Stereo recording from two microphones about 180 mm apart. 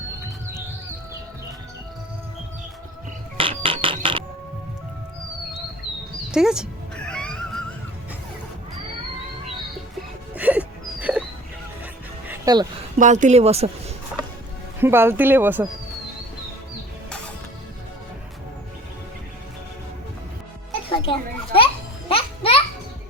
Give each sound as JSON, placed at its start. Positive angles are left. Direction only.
{"t": 3.3, "sound": "mechanisms", "side_deg": -30}
{"t": 6.3, "sound": "music", "side_deg": -5}
{"t": 10.3, "sound": "music", "side_deg": -10}
{"t": 12.5, "sound": "speech", "side_deg": -20}
{"t": 13.0, "sound": "a woman's voice", "side_deg": -45}
{"t": 14.8, "sound": "speech", "side_deg": -15}
{"t": 20.9, "sound": "children playing", "side_deg": 30}
{"t": 22.1, "sound": "music", "side_deg": 30}